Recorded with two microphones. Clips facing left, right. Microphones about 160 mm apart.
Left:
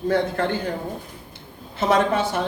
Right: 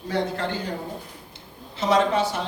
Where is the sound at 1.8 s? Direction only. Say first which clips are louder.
Left 1 dB; 55° left (ahead or behind).